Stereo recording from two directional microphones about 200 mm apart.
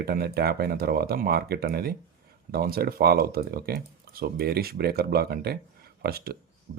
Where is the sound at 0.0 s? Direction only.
50° right (ahead or behind).